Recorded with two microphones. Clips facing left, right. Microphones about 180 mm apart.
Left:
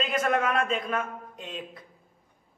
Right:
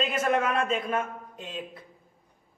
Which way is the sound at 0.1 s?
25° right (ahead or behind).